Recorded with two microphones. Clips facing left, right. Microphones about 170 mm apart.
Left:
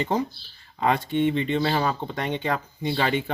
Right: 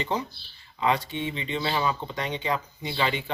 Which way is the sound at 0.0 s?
45° left (ahead or behind).